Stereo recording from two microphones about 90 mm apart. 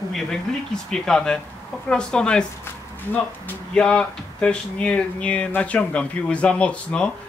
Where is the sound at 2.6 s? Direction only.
20° left (ahead or behind).